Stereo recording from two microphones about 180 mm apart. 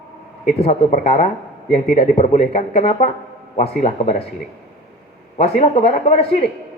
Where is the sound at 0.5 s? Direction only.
35° left (ahead or behind).